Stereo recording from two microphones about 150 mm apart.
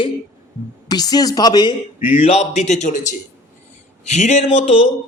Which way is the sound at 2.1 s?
45° left (ahead or behind).